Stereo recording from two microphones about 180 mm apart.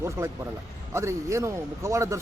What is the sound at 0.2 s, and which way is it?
A man's voice, 15° right (ahead or behind).